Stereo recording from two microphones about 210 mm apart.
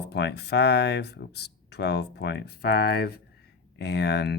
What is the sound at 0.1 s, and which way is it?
Speech, 50° left (ahead or behind).